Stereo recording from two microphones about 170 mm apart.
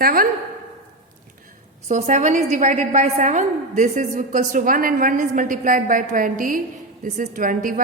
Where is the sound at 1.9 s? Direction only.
45° right (ahead or behind).